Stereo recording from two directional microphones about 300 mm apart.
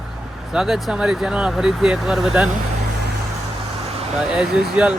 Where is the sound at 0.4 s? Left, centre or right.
Centre.